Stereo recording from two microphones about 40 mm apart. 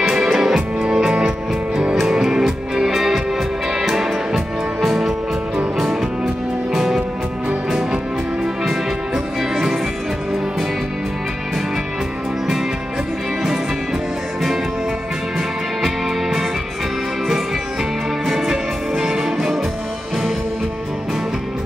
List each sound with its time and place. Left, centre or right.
0.0 s music: centre
2.1 s music: centre
2.9 s music: centre
8.6 s music: centre
15.8 s music: centre
18.2 s music: centre